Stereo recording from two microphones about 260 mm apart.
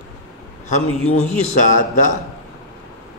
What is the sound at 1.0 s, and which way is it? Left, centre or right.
Speech, left.